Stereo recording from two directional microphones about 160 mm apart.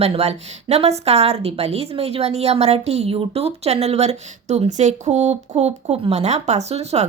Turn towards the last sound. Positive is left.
turn(degrees=-40)  # may be behind; listen again after turning